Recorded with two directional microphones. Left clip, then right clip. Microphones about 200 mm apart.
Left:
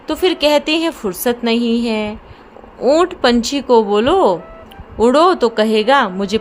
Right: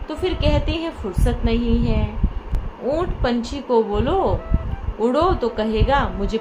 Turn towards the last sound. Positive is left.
turn(degrees=60)  # may be behind; listen again after turning